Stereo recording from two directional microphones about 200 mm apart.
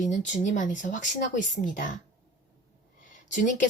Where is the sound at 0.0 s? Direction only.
40° left (ahead or behind).